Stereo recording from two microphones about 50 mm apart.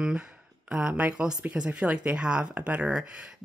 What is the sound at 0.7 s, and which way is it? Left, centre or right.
Speech, right.